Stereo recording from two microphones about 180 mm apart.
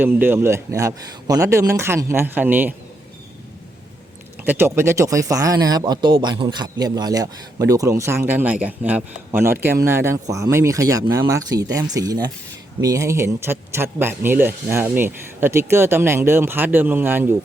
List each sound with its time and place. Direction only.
0.0 s speech: 10° right (ahead or behind)
4.4 s speech: 10° right (ahead or behind)